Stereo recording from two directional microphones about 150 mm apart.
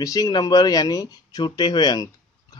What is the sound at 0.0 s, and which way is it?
Speech, 25° left (ahead or behind).